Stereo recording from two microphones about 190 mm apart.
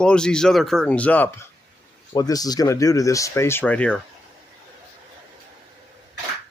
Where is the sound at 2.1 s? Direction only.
20° left (ahead or behind).